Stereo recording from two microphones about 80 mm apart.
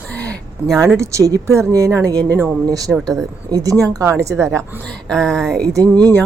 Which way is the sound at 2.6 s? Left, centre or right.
Right.